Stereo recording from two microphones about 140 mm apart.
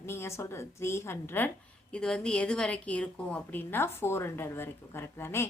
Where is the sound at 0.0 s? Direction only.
20° left (ahead or behind).